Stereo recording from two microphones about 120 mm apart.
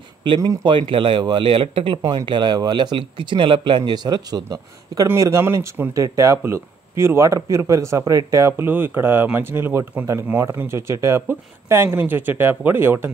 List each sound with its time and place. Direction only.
0.2 s speech: 40° right (ahead or behind); by 13.1 s 20° right (ahead or behind)